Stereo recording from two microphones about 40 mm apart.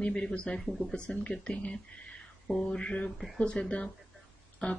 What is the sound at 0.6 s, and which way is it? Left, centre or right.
Mantra, centre.